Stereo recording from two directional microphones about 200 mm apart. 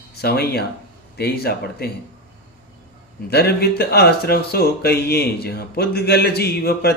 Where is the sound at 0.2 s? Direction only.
50° left (ahead or behind).